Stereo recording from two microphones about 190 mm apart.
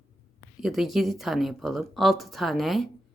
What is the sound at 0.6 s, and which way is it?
Speech, centre (ahead or behind).